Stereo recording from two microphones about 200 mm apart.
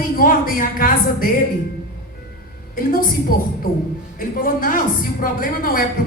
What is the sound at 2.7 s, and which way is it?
A woman's voice, 45° left (ahead or behind).